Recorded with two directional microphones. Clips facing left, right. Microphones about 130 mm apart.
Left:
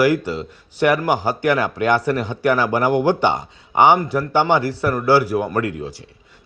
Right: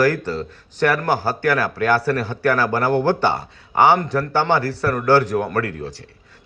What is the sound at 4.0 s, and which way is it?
A man's voice, 10° left (ahead or behind).